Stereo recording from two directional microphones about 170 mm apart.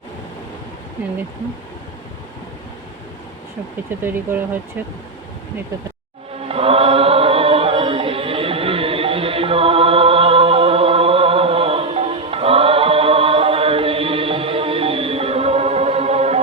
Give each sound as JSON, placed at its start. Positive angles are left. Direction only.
{"t": 4.0, "sound": "speech", "side_deg": -10}
{"t": 6.5, "sound": "chant", "side_deg": -35}